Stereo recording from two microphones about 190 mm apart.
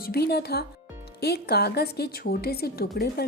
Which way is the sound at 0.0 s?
55° left (ahead or behind).